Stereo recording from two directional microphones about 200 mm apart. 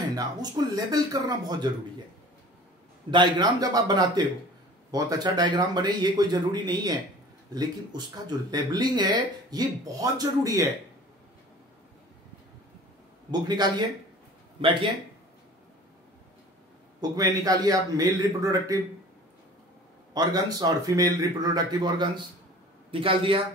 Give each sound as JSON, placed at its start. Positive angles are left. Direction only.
{"t": 0.1, "sound": "speech", "side_deg": -20}
{"t": 3.1, "sound": "speech", "side_deg": -20}
{"t": 13.3, "sound": "speech", "side_deg": -20}
{"t": 17.0, "sound": "a man's voice", "side_deg": -20}
{"t": 20.2, "sound": "speech", "side_deg": -20}